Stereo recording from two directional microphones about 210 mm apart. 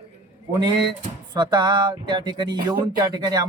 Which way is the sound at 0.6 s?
20° right (ahead or behind).